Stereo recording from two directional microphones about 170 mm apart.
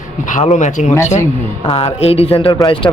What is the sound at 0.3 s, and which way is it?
A man's voice, 50° left (ahead or behind).